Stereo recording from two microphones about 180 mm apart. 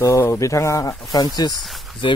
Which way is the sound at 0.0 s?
15° left (ahead or behind).